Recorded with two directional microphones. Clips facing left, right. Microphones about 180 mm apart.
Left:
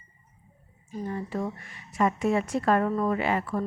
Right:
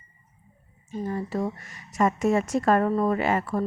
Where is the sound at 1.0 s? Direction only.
40° right (ahead or behind).